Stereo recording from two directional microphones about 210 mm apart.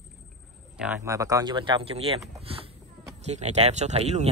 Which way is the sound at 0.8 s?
10° right (ahead or behind).